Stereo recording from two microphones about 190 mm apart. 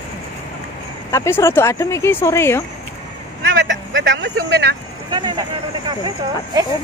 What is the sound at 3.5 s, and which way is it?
Speech, 75° right (ahead or behind).